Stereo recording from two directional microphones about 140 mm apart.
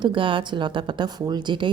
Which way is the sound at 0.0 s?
35° right (ahead or behind).